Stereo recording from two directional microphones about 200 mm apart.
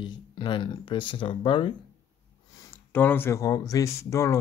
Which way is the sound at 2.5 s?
10° left (ahead or behind).